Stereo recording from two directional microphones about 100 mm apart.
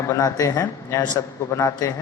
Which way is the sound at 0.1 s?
35° left (ahead or behind).